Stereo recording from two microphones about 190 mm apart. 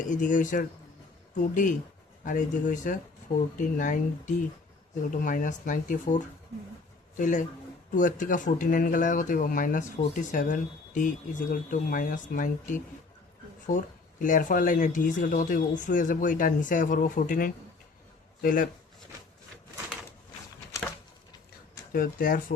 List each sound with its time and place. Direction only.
0.0 s speech: 40° left (ahead or behind)
21.9 s speech: 50° left (ahead or behind)